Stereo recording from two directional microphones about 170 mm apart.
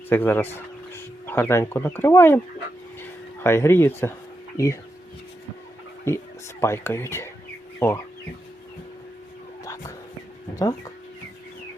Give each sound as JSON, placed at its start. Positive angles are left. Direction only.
{"t": 0.1, "sound": "speech", "side_deg": 10}
{"t": 3.0, "sound": "a sound", "side_deg": 15}
{"t": 4.5, "sound": "speech", "side_deg": 20}
{"t": 6.1, "sound": "speech", "side_deg": 15}
{"t": 10.5, "sound": "speech", "side_deg": 20}